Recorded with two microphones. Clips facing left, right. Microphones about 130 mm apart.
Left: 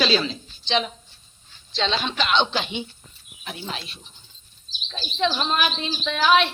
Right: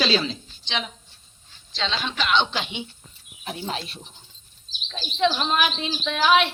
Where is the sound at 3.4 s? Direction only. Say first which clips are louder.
Right 3 dB; 30° right (ahead or behind).